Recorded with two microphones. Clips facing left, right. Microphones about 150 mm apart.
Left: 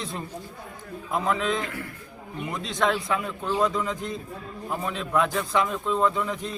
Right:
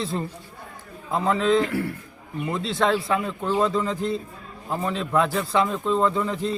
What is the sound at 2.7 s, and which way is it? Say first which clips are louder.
Speech: right 2 dB; 5° right (ahead or behind).